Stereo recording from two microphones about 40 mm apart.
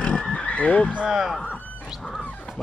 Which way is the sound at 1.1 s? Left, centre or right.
Centre.